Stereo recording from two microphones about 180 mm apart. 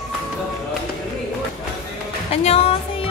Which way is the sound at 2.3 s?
35° left (ahead or behind).